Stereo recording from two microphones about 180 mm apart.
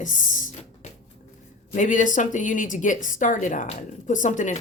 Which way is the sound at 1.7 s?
45° left (ahead or behind).